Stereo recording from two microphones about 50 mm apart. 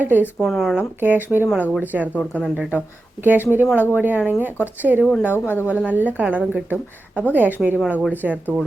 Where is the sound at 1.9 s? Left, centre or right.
Right.